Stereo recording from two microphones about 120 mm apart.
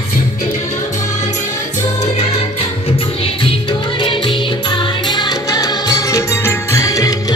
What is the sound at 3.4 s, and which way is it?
Music, 45° left (ahead or behind).